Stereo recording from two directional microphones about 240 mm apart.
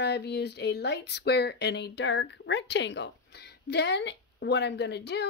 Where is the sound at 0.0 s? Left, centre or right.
Left.